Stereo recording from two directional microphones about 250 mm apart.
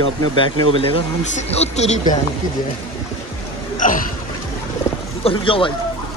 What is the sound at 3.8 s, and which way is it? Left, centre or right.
Speech, left.